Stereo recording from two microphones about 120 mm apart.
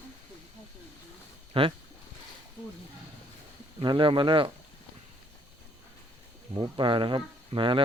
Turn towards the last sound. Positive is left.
turn(degrees=-45)  # may be behind; listen again after turning